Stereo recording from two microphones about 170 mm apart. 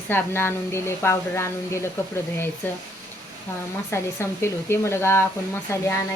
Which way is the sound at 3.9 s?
15° left (ahead or behind).